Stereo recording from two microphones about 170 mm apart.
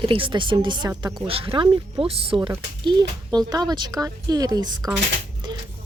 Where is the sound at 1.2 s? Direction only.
35° right (ahead or behind).